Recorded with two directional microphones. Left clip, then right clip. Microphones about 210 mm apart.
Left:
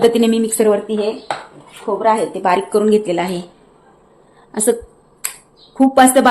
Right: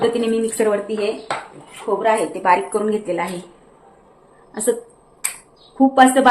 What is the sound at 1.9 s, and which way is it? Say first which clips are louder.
Speech: left 1 dB; 20° left (ahead or behind).